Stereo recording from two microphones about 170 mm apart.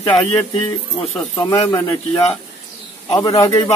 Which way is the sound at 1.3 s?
25° left (ahead or behind).